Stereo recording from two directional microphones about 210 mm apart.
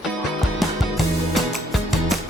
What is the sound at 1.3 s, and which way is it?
Music, centre (ahead or behind).